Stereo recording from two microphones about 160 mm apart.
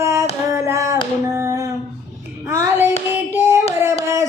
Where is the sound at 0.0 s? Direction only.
15° right (ahead or behind).